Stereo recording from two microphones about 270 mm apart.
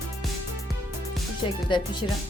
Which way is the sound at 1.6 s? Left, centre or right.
Centre.